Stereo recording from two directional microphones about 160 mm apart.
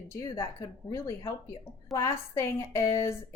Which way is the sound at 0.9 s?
20° left (ahead or behind).